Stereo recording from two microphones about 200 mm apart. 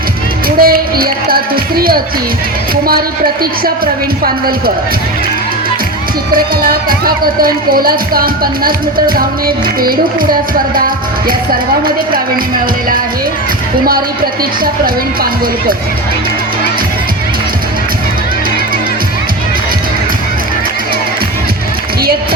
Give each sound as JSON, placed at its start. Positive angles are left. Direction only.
{"t": 0.4, "sound": "music", "side_deg": -45}
{"t": 4.2, "sound": "speech", "side_deg": -50}
{"t": 6.3, "sound": "speech", "side_deg": -45}
{"t": 14.6, "sound": "speech", "side_deg": -45}